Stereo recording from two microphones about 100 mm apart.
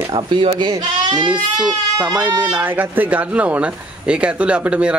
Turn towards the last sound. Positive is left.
turn(degrees=-10)  # may be behind; listen again after turning